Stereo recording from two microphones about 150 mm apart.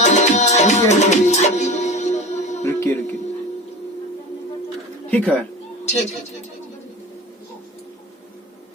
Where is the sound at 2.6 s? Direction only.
20° left (ahead or behind).